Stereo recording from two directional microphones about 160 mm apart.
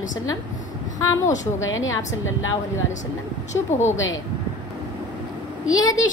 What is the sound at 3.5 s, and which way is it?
Speech, 45° left (ahead or behind).